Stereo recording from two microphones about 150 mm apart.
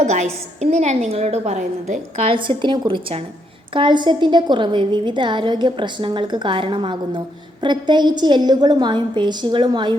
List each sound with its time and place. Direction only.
0.0 s a woman's voice: 50° right (ahead or behind)
2.3 s a woman's voice: 35° right (ahead or behind)